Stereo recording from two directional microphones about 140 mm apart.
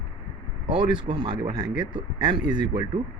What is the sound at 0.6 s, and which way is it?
Speech, 35° right (ahead or behind).